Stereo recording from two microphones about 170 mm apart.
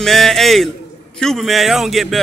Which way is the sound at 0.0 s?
Centre (ahead or behind).